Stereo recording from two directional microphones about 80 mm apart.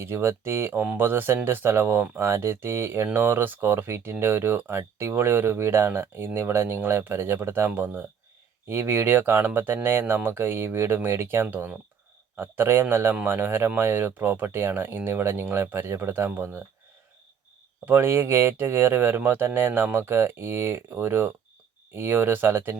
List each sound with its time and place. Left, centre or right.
0.0 s speech: right
17.8 s speech: right